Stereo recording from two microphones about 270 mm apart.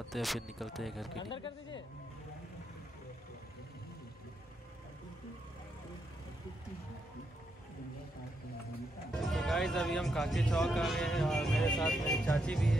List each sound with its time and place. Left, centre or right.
0.1 s speech: centre
1.2 s speech: centre
9.1 s speech: centre